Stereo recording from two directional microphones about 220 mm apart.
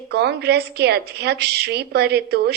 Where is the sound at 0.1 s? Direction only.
50° right (ahead or behind).